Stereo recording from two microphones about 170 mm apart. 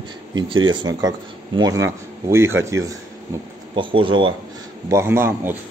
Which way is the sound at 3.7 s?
30° right (ahead or behind).